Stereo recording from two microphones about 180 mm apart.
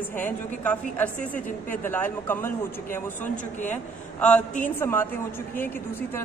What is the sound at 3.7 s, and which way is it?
Speech, 5° left (ahead or behind).